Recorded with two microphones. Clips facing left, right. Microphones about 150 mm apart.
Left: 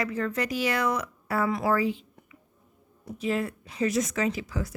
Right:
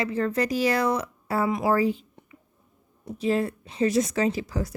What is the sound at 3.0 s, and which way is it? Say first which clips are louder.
Speech: right 4 dB; 35° right (ahead or behind).